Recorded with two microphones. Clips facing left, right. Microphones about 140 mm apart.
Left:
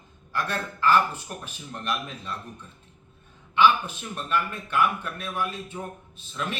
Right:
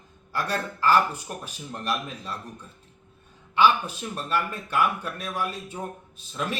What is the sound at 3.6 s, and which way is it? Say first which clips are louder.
A man's voice: even; 35° right (ahead or behind).